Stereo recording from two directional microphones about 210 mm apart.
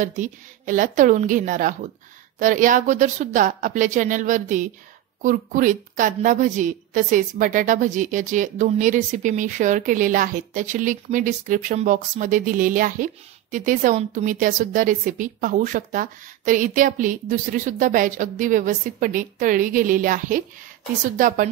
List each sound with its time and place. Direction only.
0.0 s a woman's voice: 40° right (ahead or behind)